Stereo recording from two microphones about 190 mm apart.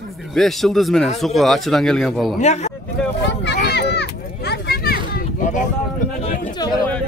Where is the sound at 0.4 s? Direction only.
Centre (ahead or behind).